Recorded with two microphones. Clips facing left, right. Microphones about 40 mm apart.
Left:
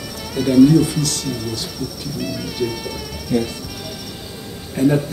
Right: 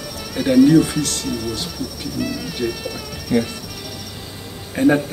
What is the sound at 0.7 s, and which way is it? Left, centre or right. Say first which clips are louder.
Speech: right 1 dB; right.